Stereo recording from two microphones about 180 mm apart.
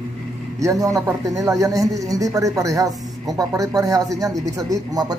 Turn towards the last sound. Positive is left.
turn(degrees=-20)  # may be behind; listen again after turning